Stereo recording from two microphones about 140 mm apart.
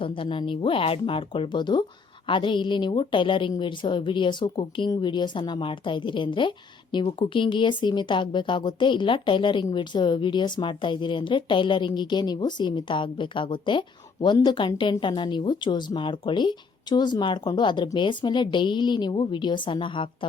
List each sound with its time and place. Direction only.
0.2 s speech: 40° left (ahead or behind)